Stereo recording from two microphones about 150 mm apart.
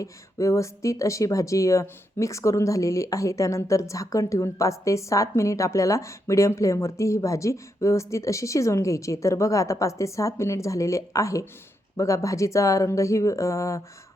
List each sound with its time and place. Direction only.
0.0 s speech: 20° left (ahead or behind)